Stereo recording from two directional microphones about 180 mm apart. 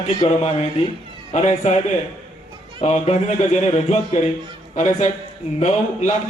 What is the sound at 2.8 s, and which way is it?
A man's voice, 40° left (ahead or behind).